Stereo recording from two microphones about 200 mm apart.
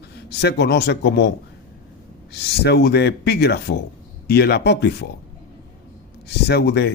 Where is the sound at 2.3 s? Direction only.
55° left (ahead or behind).